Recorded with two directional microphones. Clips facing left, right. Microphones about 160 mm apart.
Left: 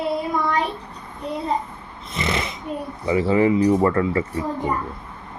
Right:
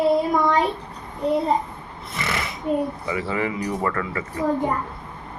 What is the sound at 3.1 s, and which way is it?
Speech, 30° left (ahead or behind).